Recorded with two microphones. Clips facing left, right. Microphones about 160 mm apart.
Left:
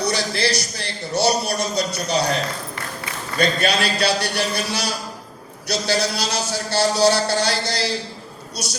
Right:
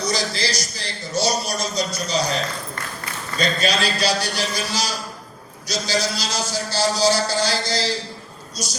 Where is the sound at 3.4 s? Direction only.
60° left (ahead or behind).